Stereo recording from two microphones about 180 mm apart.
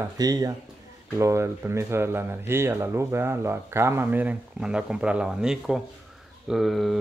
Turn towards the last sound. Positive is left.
turn(degrees=0)  # may be behind; listen again after turning